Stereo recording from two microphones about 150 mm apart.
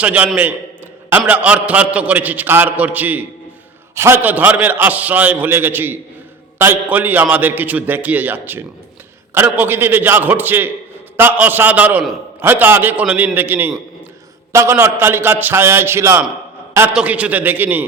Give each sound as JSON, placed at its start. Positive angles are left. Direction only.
{"t": 0.0, "sound": "a man's voice", "side_deg": -10}
{"t": 1.3, "sound": "a man's voice", "side_deg": -10}